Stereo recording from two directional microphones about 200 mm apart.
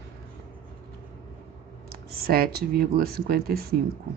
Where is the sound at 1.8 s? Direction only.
50° right (ahead or behind).